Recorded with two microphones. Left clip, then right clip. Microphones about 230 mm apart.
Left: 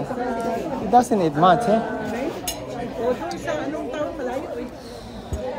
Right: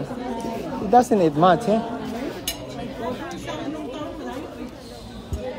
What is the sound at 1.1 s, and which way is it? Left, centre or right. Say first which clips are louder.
Speech: even; centre.